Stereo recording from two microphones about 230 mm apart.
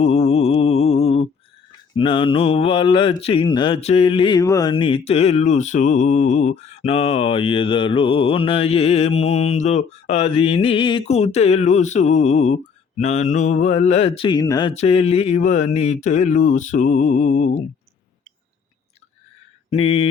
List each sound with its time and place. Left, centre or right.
0.0 s mantra: left
2.0 s speech: left
14.7 s mantra: left
19.7 s speech: left